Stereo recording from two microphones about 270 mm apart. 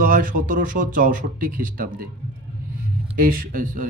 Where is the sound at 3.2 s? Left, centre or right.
Right.